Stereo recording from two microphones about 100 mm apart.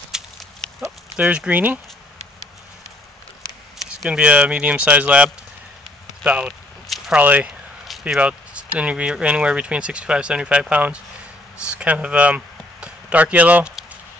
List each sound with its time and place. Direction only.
0.1 s horse: 5° right (ahead or behind)
0.6 s clip-clop: 10° left (ahead or behind)
1.1 s speech: 15° right (ahead or behind)
3.7 s a sound: 5° right (ahead or behind)
4.2 s speech: 15° right (ahead or behind)